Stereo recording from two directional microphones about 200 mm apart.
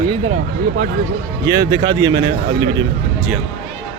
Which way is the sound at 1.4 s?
20° right (ahead or behind).